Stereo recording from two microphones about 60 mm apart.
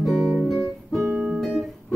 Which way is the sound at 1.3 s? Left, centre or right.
Centre.